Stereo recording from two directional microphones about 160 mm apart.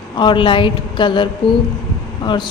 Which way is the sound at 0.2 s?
30° left (ahead or behind).